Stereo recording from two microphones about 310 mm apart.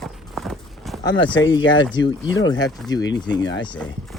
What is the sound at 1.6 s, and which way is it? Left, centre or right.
Speech, left.